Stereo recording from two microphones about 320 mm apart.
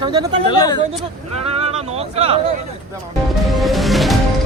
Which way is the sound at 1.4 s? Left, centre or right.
Centre.